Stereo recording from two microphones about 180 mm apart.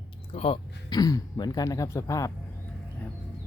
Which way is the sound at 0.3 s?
30° left (ahead or behind).